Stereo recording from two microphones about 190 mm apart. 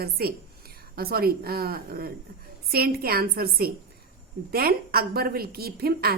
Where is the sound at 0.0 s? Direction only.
55° right (ahead or behind).